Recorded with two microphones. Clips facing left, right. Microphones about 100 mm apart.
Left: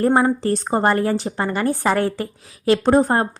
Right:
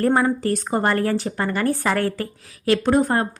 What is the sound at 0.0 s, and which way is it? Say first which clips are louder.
A woman's voice: left 2 dB; 20° left (ahead or behind).